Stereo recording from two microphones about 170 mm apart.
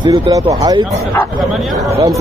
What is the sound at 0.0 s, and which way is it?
Speech, 20° right (ahead or behind).